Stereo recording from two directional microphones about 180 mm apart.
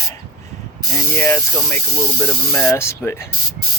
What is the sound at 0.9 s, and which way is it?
Spray, 15° left (ahead or behind).